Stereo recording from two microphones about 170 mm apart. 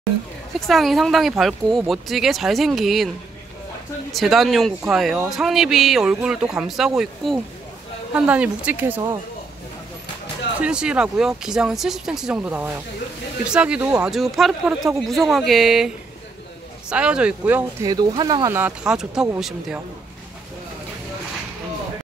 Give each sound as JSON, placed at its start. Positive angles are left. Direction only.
{"t": 0.7, "sound": "speech", "side_deg": 0}
{"t": 4.1, "sound": "speech", "side_deg": 0}
{"t": 10.6, "sound": "speech", "side_deg": -5}
{"t": 16.9, "sound": "speech", "side_deg": -5}
{"t": 17.8, "sound": "speech", "side_deg": -25}
{"t": 18.6, "sound": "speech", "side_deg": -5}